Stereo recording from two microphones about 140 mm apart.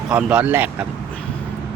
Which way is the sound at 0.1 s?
10° right (ahead or behind).